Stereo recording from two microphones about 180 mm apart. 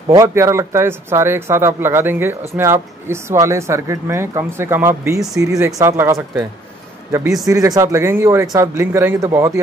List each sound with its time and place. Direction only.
0.1 s speech: 15° right (ahead or behind)
7.4 s speech: 20° right (ahead or behind)